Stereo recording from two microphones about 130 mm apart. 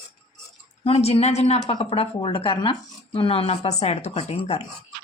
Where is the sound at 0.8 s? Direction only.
50° left (ahead or behind).